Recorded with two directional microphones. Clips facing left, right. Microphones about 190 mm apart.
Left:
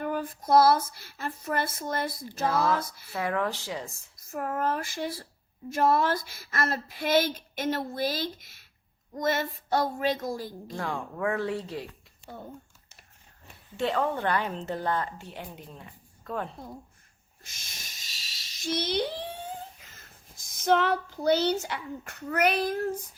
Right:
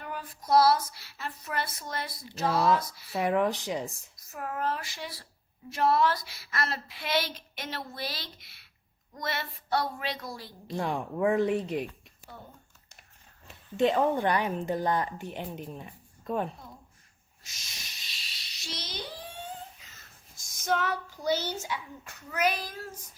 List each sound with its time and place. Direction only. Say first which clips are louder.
0.0 s a sound: left 9 dB; 50° left (ahead or behind)
2.8 s speech: even; 50° left (ahead or behind)
3.1 s a woman's voice: right 3 dB; 20° right (ahead or behind)
4.3 s speech: left 3 dB; 45° left (ahead or behind)
10.8 s speech: right 3 dB; 20° right (ahead or behind)
13.7 s a woman's voice: right 3 dB; 15° right (ahead or behind)
17.4 s a sound: left 1 dB; 55° left (ahead or behind)
19.8 s a child's voice: left 2 dB; 50° left (ahead or behind)